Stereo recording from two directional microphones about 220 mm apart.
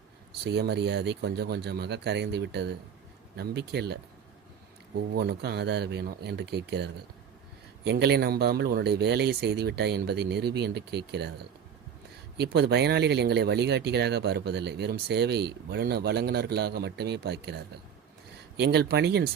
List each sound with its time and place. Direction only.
0.4 s speech: 50° right (ahead or behind)
5.1 s speech: 45° right (ahead or behind)
12.4 s speech: 50° right (ahead or behind)